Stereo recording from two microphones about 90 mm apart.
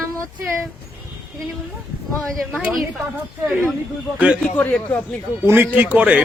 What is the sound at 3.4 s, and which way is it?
Speech, 20° right (ahead or behind).